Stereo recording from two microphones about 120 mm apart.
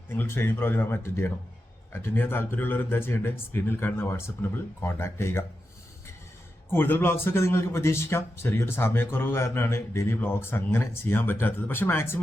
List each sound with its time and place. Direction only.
0.2 s a man's voice: 20° left (ahead or behind)
6.7 s a man's voice: 15° left (ahead or behind)